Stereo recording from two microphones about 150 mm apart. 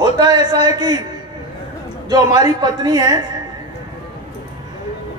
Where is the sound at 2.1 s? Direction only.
25° right (ahead or behind).